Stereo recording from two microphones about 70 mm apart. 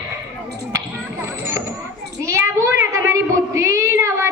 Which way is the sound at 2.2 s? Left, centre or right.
Right.